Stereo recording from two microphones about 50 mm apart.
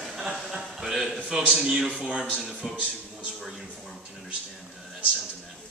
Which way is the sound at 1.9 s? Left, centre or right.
Right.